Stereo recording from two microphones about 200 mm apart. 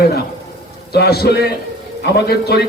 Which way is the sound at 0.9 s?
55° left (ahead or behind).